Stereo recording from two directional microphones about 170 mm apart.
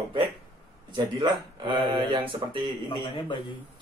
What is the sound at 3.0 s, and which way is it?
Speech, 30° left (ahead or behind).